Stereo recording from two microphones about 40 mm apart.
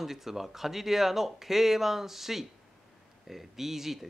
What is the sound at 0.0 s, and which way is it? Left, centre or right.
Speech, centre.